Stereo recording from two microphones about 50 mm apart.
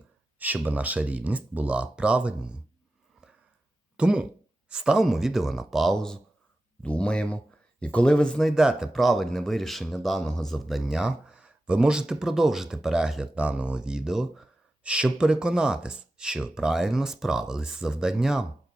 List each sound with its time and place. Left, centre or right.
0.3 s speech: right
3.9 s speech: centre
5.9 s speech: centre
6.8 s speech: left
8.5 s speech: centre
8.9 s speech: centre
14.8 s speech: right